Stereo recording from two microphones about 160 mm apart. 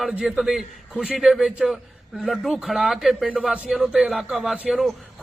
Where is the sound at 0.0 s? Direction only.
Centre (ahead or behind).